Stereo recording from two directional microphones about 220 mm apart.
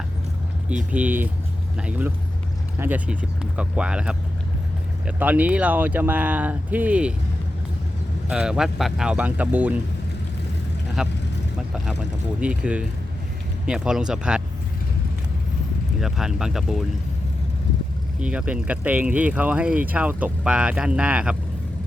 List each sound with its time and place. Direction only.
0.9 s speech: 5° right (ahead or behind)
8.3 s speech: 5° right (ahead or behind)
11.0 s speech: 5° right (ahead or behind)
12.4 s speech: 5° right (ahead or behind)
16.0 s speech: centre (ahead or behind)
18.2 s speech: 5° right (ahead or behind)